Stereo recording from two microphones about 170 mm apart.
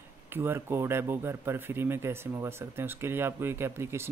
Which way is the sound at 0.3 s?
15° right (ahead or behind).